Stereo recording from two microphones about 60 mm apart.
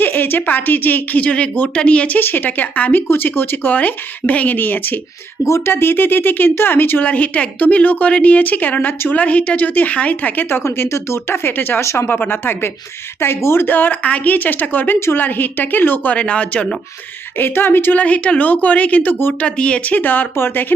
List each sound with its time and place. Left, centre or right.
0.0 s speech: left
5.5 s speech: left
7.0 s a woman's voice: left
10.6 s speech: left
11.8 s speech: left
12.0 s speech: left
16.1 s a woman's voice: centre
17.3 s speech: left
18.0 s a woman's voice: left
19.5 s speech: centre; by 20.7 s left